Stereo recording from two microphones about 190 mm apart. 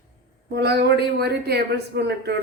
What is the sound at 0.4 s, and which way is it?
A woman's voice, 60° right (ahead or behind).